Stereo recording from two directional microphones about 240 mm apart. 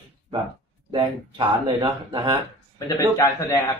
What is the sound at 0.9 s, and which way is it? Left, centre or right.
Speech, centre.